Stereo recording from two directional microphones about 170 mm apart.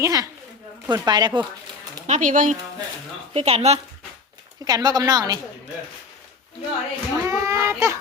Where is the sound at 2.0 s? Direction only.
50° right (ahead or behind).